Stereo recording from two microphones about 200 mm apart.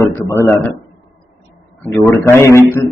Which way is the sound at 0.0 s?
15° left (ahead or behind).